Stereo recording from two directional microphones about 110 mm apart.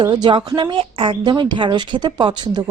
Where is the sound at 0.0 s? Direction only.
40° right (ahead or behind).